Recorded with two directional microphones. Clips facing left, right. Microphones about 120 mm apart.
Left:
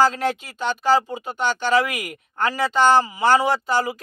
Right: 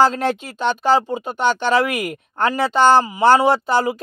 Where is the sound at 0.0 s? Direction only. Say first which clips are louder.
Right 3 dB; 25° right (ahead or behind).